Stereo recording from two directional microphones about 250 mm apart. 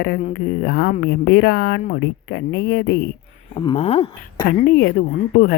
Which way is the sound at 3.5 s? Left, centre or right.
Left.